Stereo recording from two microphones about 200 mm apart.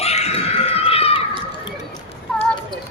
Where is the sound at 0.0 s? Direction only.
30° left (ahead or behind).